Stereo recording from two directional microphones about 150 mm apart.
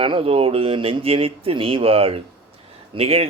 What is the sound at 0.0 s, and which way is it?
A man's voice, 40° right (ahead or behind).